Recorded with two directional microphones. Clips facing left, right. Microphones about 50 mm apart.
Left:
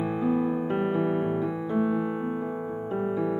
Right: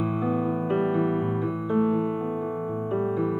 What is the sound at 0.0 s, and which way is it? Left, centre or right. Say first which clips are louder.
Music: even; centre.